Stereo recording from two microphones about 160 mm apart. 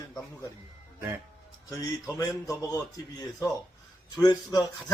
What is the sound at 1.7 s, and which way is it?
Speech, 20° left (ahead or behind).